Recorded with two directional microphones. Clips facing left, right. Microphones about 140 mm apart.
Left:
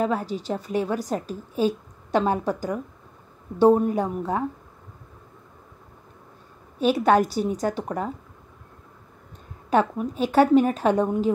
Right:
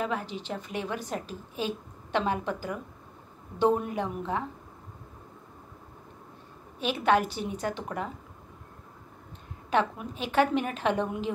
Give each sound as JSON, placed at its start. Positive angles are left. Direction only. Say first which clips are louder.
{"t": 0.0, "sound": "a woman's voice", "louder": "left 7 dB", "side_deg": 40}
{"t": 6.8, "sound": "a woman's voice", "louder": "left 6 dB", "side_deg": 40}
{"t": 9.7, "sound": "a woman's voice", "louder": "left 6 dB", "side_deg": 40}